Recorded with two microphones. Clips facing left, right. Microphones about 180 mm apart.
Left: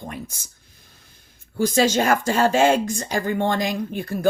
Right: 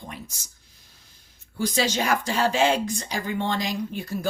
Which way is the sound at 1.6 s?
45° left (ahead or behind).